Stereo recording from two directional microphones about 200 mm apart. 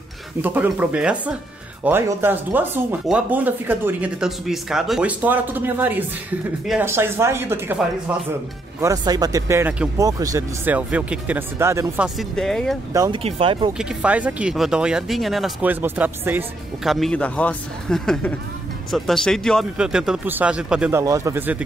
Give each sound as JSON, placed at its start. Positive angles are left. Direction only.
{"t": 0.4, "sound": "speech", "side_deg": -10}
{"t": 8.8, "sound": "speech", "side_deg": -20}
{"t": 12.2, "sound": "speech", "side_deg": 0}
{"t": 12.9, "sound": "speech", "side_deg": -20}
{"t": 13.7, "sound": "speech", "side_deg": -5}